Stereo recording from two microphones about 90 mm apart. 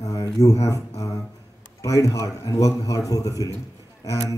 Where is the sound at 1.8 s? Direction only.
35° left (ahead or behind).